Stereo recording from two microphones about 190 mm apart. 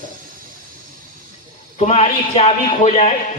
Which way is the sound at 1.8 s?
30° left (ahead or behind).